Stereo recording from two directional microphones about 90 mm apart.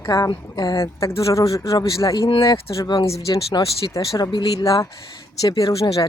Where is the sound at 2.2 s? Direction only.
70° left (ahead or behind).